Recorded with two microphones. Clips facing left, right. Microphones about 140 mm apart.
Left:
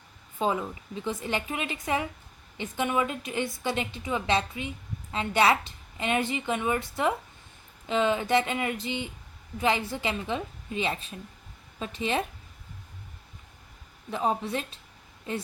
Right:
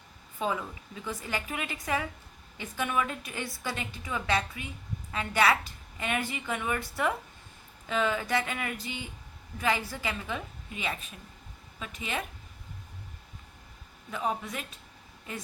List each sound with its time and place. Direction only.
0.3 s a woman's voice: 25° left (ahead or behind)
14.1 s a woman's voice: 30° left (ahead or behind)